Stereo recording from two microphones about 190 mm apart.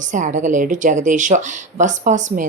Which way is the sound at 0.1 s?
40° right (ahead or behind).